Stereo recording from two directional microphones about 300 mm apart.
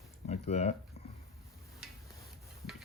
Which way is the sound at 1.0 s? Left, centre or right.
Left.